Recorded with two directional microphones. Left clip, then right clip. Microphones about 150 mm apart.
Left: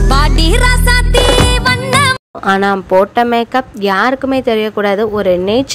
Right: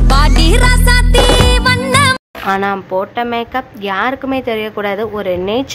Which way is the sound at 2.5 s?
40° left (ahead or behind).